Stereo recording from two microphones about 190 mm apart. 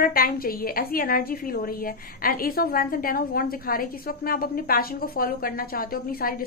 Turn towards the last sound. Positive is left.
turn(degrees=50)  # may be behind; listen again after turning